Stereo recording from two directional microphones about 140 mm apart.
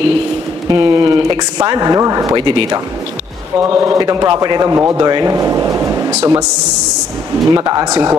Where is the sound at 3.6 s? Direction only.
20° right (ahead or behind).